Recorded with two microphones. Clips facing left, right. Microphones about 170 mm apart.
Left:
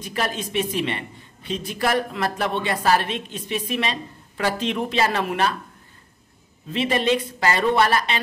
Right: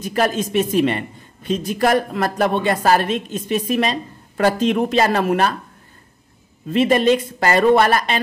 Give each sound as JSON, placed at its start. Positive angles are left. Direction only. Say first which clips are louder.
{"t": 0.0, "sound": "a woman's voice", "louder": "right 7 dB", "side_deg": -45}
{"t": 6.7, "sound": "a woman's voice", "louder": "right 6 dB", "side_deg": -45}